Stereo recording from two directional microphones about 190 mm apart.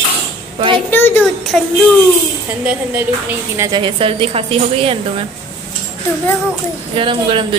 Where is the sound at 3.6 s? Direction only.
25° right (ahead or behind).